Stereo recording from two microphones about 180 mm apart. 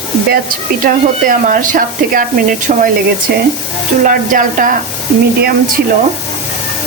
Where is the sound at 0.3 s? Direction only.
50° right (ahead or behind).